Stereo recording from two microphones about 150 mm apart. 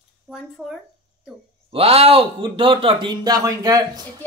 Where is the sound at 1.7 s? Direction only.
40° right (ahead or behind); by 4.0 s 25° right (ahead or behind).